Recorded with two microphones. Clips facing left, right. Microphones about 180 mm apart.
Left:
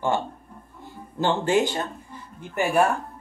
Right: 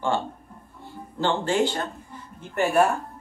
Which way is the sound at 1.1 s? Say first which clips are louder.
Left 1 dB; 20° left (ahead or behind).